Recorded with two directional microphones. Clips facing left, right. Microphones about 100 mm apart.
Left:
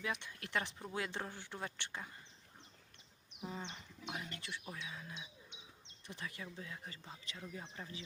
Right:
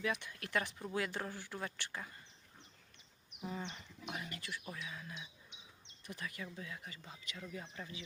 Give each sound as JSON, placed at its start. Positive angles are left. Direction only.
{"t": 0.0, "sound": "speech", "side_deg": 25}
{"t": 3.4, "sound": "speech", "side_deg": 20}